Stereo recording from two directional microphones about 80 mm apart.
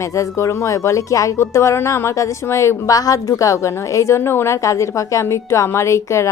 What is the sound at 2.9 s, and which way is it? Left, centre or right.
A woman's voice, left.